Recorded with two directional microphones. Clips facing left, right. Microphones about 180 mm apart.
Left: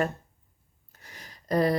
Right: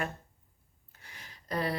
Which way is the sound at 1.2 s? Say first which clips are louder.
Left 9 dB; 40° left (ahead or behind).